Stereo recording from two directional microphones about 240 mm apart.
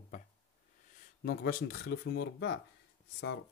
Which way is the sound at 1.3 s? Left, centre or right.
Left.